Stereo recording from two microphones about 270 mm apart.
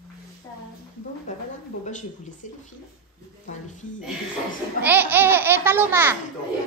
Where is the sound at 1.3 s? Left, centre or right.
Left.